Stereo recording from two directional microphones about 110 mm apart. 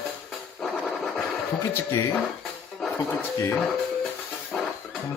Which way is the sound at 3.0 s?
30° left (ahead or behind).